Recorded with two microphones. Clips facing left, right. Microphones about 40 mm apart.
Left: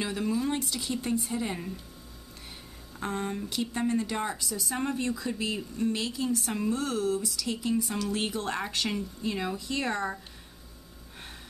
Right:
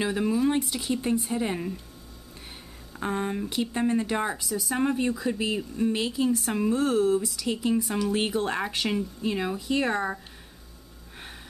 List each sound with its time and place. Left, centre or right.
0.0 s speech: centre
3.0 s speech: centre